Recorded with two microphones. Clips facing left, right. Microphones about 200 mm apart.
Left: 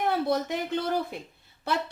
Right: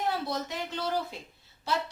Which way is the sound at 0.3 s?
55° left (ahead or behind).